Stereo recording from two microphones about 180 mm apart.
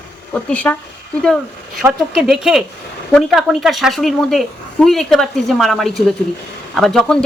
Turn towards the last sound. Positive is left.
turn(degrees=0)  # may be behind; listen again after turning